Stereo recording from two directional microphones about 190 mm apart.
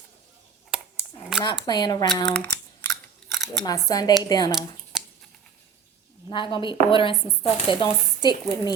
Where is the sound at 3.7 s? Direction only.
20° left (ahead or behind).